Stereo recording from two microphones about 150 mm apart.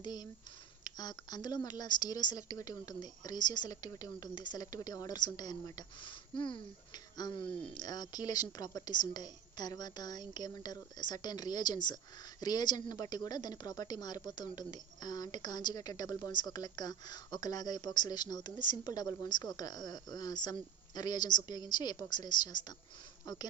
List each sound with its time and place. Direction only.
0.0 s a woman's voice: 25° left (ahead or behind)